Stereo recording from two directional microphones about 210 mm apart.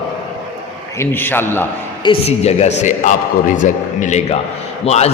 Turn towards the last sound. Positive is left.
turn(degrees=30)  # may be behind; listen again after turning